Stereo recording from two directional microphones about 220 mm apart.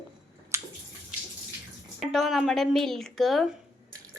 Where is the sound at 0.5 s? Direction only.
10° right (ahead or behind).